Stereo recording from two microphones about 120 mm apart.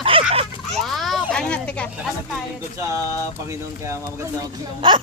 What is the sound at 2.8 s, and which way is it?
Speech, 25° right (ahead or behind).